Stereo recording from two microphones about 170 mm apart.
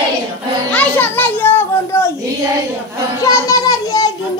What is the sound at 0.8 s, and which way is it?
Children playing, 10° left (ahead or behind).